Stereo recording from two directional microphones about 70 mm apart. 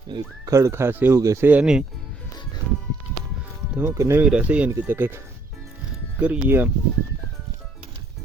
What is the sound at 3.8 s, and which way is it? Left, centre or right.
Speech, right.